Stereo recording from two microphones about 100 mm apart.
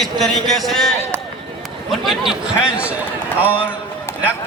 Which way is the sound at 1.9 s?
Centre (ahead or behind).